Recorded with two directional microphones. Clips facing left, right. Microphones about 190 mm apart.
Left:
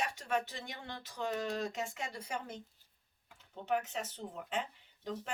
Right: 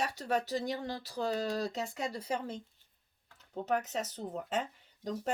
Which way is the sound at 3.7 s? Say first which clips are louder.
Right 2 dB; 40° right (ahead or behind).